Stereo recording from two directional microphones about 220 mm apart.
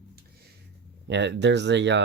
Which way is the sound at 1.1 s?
55° right (ahead or behind).